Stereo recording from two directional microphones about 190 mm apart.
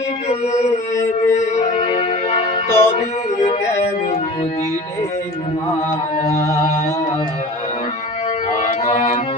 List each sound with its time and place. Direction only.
0.3 s music: 35° left (ahead or behind)
2.6 s music: 15° left (ahead or behind)
8.5 s music: 40° left (ahead or behind)